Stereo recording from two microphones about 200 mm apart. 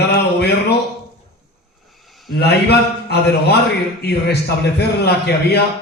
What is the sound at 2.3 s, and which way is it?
A man's voice, 55° left (ahead or behind).